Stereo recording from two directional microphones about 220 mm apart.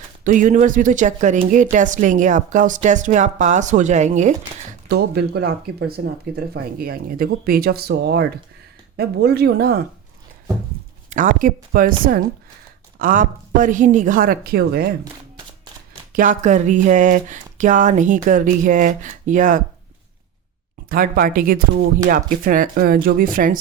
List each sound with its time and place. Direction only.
0.3 s speech: 35° right (ahead or behind)
4.9 s speech: 45° right (ahead or behind)
11.1 s speech: 35° right (ahead or behind)
16.1 s speech: 35° right (ahead or behind)
20.9 s speech: 40° right (ahead or behind)